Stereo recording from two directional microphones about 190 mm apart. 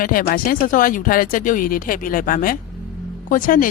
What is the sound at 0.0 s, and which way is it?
A man's voice, 50° left (ahead or behind).